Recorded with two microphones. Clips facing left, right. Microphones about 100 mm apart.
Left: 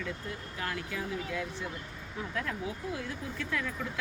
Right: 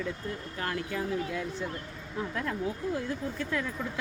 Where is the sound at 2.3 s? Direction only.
30° right (ahead or behind).